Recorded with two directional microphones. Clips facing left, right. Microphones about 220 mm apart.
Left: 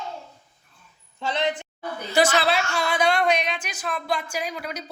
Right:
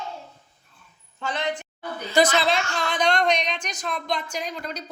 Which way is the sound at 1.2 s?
20° left (ahead or behind).